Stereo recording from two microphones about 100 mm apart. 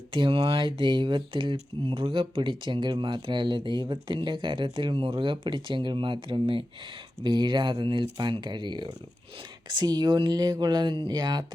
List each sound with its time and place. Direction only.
0.1 s speech: 60° right (ahead or behind)
11.1 s speech: 40° right (ahead or behind)